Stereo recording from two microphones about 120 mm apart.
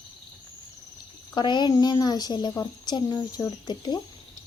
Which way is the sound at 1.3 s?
40° left (ahead or behind).